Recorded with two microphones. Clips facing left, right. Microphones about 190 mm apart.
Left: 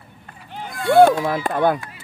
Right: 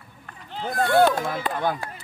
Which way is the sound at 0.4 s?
15° left (ahead or behind).